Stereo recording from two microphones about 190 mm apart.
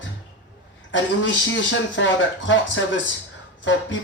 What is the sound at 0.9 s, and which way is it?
Speech, 75° left (ahead or behind).